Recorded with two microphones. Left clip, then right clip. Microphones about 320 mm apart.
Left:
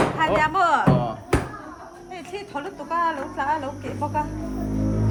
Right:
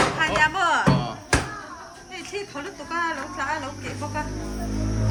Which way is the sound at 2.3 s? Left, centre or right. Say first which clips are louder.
Left 1 dB; left.